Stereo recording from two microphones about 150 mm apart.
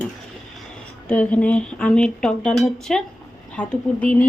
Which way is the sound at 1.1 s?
10° left (ahead or behind).